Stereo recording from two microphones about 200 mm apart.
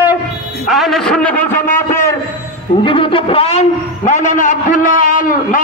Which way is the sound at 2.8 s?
25° left (ahead or behind).